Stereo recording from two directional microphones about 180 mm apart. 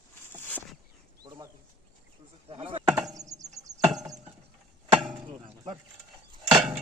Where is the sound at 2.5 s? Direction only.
30° right (ahead or behind).